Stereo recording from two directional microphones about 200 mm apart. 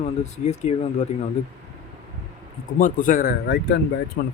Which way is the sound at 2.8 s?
45° left (ahead or behind).